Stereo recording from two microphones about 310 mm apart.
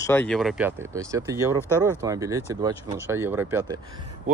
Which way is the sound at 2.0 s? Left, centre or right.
Centre.